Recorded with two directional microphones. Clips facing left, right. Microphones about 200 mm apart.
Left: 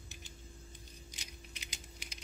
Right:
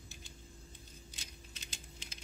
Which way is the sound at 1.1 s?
15° left (ahead or behind).